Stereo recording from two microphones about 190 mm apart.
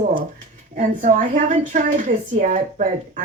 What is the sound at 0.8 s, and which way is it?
A woman's voice, 45° right (ahead or behind).